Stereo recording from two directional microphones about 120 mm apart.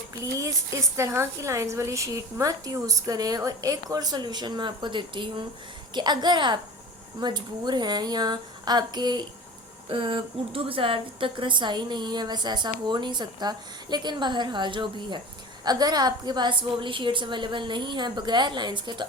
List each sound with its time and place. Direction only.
0.2 s a woman's voice: 25° right (ahead or behind)